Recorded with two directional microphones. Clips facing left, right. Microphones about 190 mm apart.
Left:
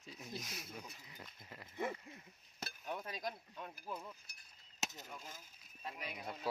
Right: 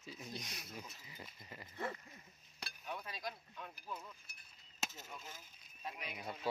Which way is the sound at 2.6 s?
45° left (ahead or behind).